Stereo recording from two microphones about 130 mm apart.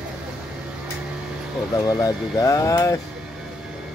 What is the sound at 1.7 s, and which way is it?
Speech, 25° left (ahead or behind).